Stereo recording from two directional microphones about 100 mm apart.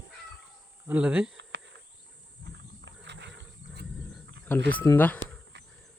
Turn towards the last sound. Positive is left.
turn(degrees=15)  # may be behind; listen again after turning